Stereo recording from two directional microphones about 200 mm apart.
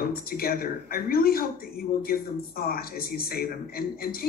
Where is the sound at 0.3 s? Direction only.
45° left (ahead or behind).